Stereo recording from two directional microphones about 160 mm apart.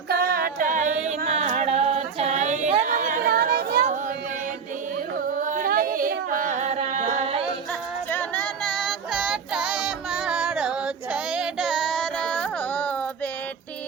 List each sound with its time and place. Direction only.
0.1 s a capella: 70° right (ahead or behind)
5.4 s singing: 55° right (ahead or behind)
8.1 s female singing: 10° left (ahead or behind)